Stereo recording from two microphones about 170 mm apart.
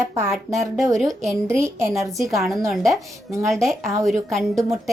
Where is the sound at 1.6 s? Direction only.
15° right (ahead or behind).